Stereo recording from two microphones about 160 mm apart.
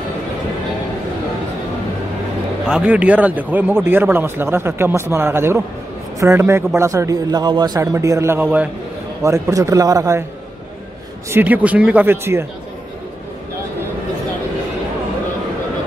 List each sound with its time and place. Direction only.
2.6 s a man's voice: 5° right (ahead or behind)
11.2 s speech: 10° right (ahead or behind)